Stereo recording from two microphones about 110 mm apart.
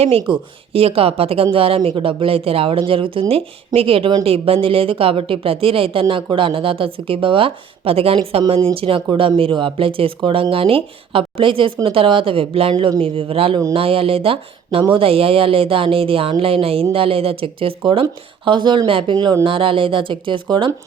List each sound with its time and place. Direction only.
0.0 s speech: 60° right (ahead or behind)
9.0 s speech: 45° right (ahead or behind)
18.0 s speech: 45° right (ahead or behind)